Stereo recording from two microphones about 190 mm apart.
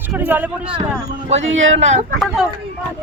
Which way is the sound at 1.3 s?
35° right (ahead or behind).